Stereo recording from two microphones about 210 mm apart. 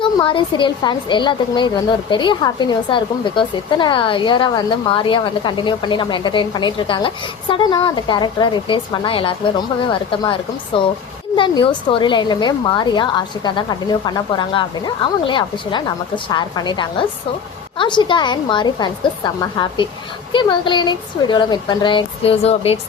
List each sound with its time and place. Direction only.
0.0 s a woman's voice: 25° left (ahead or behind)